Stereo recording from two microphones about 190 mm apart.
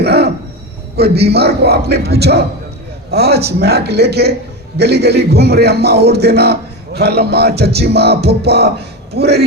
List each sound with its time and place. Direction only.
0.0 s music: 60° right (ahead or behind)
0.9 s a man's voice: 55° right (ahead or behind)